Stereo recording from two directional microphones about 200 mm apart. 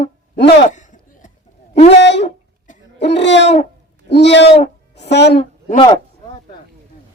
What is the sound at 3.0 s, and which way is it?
Owl, 60° left (ahead or behind).